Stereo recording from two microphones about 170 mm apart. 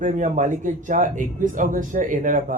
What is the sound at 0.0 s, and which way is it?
A man's voice, 50° right (ahead or behind).